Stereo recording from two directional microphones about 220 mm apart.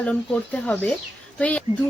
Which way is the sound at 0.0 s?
5° left (ahead or behind).